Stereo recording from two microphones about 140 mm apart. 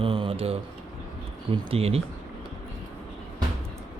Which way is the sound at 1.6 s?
45° right (ahead or behind).